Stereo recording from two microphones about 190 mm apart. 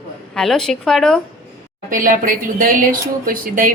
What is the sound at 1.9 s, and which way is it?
A woman's voice, 45° right (ahead or behind).